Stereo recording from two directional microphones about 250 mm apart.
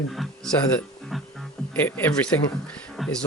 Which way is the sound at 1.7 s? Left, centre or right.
Centre.